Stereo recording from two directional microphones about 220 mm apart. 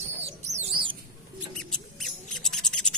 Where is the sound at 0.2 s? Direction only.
30° right (ahead or behind).